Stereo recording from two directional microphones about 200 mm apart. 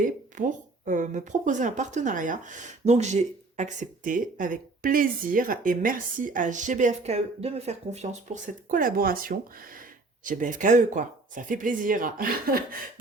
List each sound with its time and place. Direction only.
0.0 s speech: 40° right (ahead or behind)